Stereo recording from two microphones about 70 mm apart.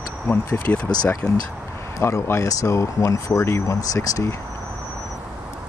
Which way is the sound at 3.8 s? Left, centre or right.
Left.